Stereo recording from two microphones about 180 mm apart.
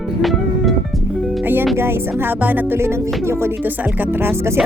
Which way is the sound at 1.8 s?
10° right (ahead or behind).